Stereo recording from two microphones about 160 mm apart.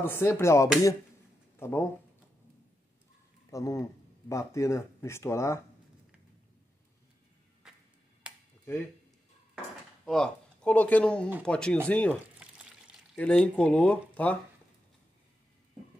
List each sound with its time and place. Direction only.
0.0 s speech: 15° left (ahead or behind)
3.4 s speech: 20° left (ahead or behind)
7.7 s finger snapping: 5° right (ahead or behind)
10.0 s speech: 5° left (ahead or behind)
12.4 s pour: 5° right (ahead or behind)
13.2 s speech: 5° left (ahead or behind)